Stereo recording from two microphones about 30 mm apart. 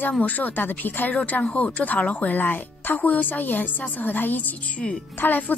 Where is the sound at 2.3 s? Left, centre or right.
Left.